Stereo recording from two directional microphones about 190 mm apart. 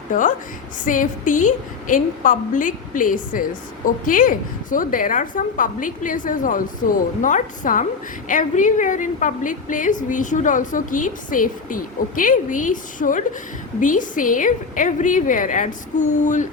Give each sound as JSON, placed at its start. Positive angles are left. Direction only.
{"t": 0.1, "sound": "a woman's voice", "side_deg": 45}